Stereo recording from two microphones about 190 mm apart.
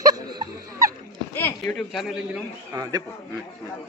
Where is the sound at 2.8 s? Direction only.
20° right (ahead or behind).